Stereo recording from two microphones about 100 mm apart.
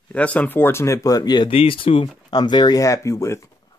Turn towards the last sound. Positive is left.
turn(degrees=30)  # may be behind; listen again after turning